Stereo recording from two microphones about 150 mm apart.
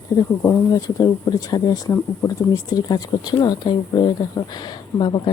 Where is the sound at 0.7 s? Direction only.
25° left (ahead or behind).